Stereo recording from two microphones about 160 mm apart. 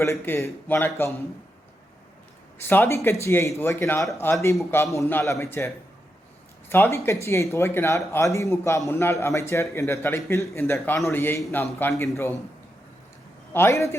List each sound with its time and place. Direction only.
0.0 s speech: 20° left (ahead or behind)
2.6 s speech: 15° left (ahead or behind)
13.5 s a man's voice: 15° left (ahead or behind)